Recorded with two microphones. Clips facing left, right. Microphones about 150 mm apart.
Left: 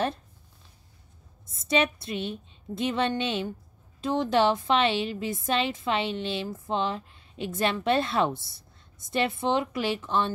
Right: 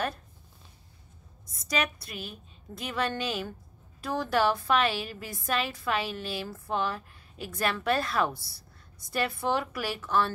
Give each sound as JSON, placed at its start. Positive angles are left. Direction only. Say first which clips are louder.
{"t": 1.6, "sound": "a woman's voice", "louder": "left 6 dB", "side_deg": 25}